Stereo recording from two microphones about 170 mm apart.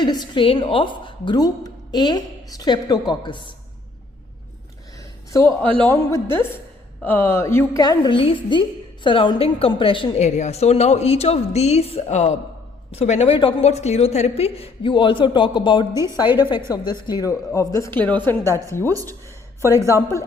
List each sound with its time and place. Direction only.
0.0 s a woman's voice: 25° left (ahead or behind)
5.7 s a man's voice: 10° left (ahead or behind)
19.9 s a man's voice: 20° left (ahead or behind)